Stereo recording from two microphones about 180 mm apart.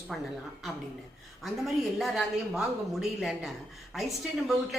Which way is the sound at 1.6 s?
Centre (ahead or behind).